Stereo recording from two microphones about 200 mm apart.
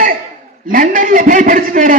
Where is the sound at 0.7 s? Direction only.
40° right (ahead or behind).